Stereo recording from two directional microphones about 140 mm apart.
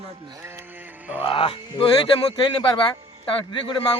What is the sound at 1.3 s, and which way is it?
Speech, 40° left (ahead or behind).